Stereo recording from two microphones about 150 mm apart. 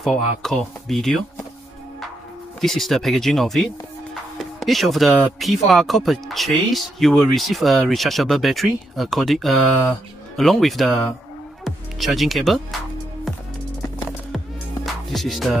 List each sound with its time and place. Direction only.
0.0 s speech: centre (ahead or behind)
2.6 s speech: centre (ahead or behind)
4.1 s music: centre (ahead or behind)
5.4 s speech: centre (ahead or behind)
15.0 s music: centre (ahead or behind)